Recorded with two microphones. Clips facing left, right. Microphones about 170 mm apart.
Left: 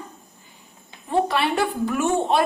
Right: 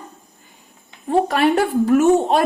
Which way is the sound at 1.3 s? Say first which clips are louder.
Right 6 dB; 45° right (ahead or behind).